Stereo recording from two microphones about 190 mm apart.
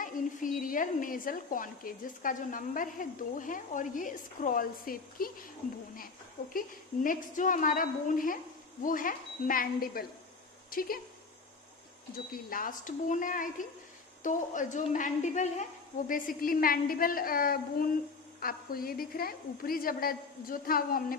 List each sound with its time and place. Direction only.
0.0 s a woman's voice: 45° left (ahead or behind)
6.5 s a woman's voice: 45° left (ahead or behind)
12.5 s a woman's voice: 45° left (ahead or behind)